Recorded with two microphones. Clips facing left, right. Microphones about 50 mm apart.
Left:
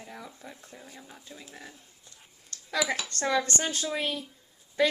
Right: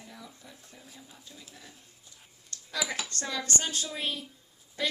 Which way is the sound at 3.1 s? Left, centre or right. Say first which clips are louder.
Left 6 dB; left.